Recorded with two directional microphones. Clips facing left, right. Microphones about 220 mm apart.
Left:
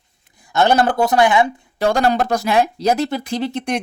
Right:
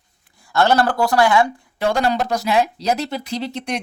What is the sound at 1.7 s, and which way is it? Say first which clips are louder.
Speech: left 3 dB; 45° left (ahead or behind).